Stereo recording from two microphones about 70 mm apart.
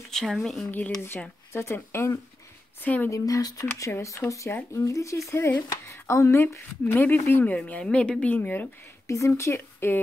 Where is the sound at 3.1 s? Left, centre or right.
Left.